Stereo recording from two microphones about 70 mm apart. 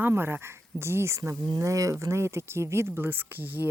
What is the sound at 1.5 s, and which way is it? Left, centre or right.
Speech, right.